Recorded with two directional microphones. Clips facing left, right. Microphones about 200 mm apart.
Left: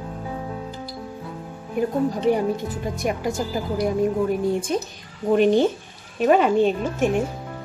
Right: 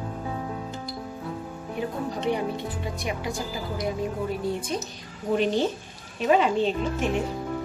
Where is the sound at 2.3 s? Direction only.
45° left (ahead or behind).